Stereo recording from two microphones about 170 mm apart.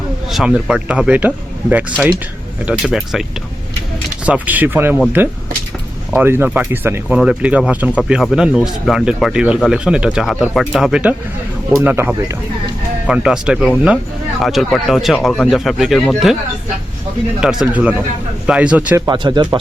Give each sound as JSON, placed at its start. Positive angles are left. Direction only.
{"t": 0.3, "sound": "speech", "side_deg": -5}
{"t": 2.6, "sound": "speech", "side_deg": -5}
{"t": 4.3, "sound": "speech", "side_deg": -10}
{"t": 17.4, "sound": "speech", "side_deg": -5}
{"t": 19.0, "sound": "speech", "side_deg": -25}